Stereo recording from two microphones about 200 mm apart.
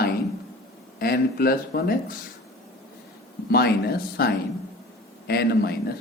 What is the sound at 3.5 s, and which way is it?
Speech, 50° left (ahead or behind).